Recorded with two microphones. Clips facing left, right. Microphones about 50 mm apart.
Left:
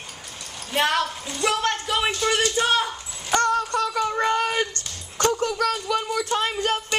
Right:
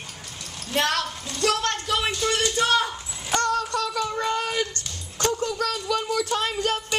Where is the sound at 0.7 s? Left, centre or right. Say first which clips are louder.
Left 2 dB; centre.